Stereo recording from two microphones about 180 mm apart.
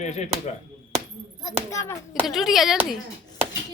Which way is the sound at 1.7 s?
15° left (ahead or behind).